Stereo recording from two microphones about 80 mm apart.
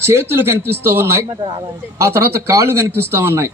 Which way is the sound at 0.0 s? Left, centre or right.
Right.